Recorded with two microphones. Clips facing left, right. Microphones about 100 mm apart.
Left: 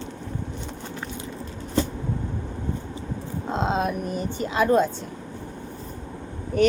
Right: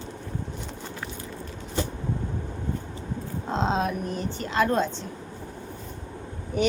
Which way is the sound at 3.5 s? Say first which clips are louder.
Left 1 dB; 5° left (ahead or behind).